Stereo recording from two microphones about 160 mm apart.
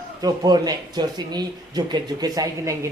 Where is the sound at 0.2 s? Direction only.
25° right (ahead or behind).